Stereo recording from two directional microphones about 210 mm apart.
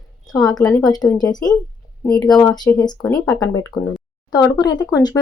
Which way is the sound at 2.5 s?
20° left (ahead or behind).